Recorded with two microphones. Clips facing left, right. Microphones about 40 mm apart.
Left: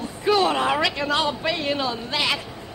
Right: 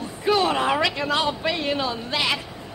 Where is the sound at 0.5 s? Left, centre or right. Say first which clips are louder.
Even; centre.